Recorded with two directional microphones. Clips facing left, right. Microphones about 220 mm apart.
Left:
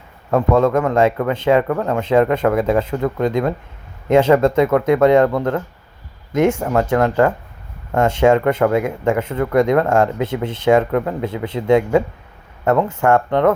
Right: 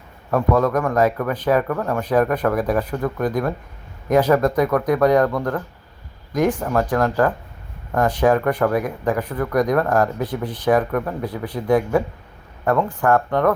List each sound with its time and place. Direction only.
0.3 s speech: 25° left (ahead or behind)